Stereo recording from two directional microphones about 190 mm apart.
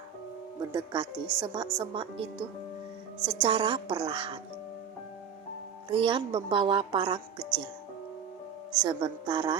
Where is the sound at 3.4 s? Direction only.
25° right (ahead or behind).